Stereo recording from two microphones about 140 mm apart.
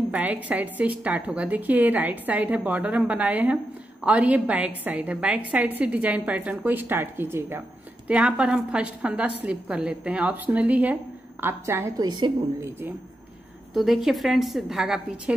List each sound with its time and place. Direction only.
0.1 s a woman's voice: 10° right (ahead or behind)
12.1 s a woman's voice: 30° right (ahead or behind)
13.7 s a woman's voice: centre (ahead or behind)